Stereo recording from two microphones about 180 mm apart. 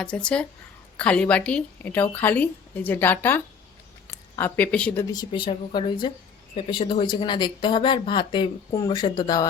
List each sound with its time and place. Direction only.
0.0 s a woman's voice: 5° left (ahead or behind)
5.1 s speech: 25° left (ahead or behind)